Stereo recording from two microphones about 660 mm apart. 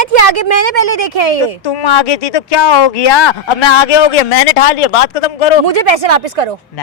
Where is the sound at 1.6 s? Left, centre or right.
Left.